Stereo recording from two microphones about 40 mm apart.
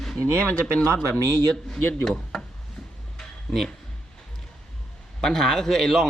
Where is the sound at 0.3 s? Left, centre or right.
Right.